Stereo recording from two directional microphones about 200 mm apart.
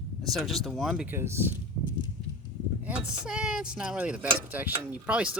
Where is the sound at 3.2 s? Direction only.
5° right (ahead or behind).